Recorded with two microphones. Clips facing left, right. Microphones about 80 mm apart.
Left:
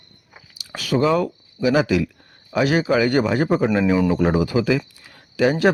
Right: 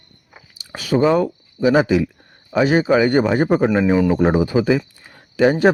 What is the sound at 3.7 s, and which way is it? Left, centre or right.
Speech, right.